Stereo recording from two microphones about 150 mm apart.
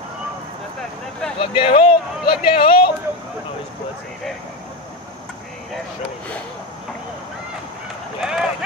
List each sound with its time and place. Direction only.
1.4 s speech: 35° left (ahead or behind)
8.2 s speech: centre (ahead or behind)